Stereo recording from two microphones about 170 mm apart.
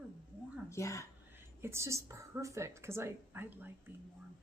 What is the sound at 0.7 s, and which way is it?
Speech, 15° left (ahead or behind).